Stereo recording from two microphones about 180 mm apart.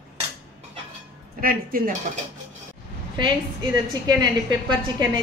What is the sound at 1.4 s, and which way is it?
Speech, 50° right (ahead or behind).